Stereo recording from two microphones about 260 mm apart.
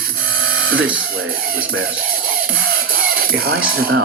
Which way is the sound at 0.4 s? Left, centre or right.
Right.